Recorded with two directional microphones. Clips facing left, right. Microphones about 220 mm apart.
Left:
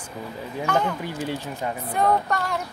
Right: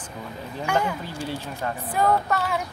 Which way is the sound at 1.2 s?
15° left (ahead or behind).